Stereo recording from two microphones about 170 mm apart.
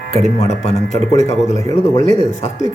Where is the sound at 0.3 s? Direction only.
40° left (ahead or behind).